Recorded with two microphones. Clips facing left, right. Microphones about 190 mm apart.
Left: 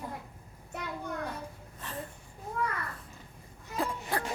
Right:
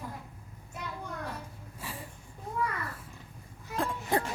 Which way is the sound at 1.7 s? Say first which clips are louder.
Left 1 dB; 10° right (ahead or behind).